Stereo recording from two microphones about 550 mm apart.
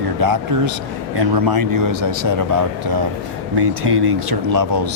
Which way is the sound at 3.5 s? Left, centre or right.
Right.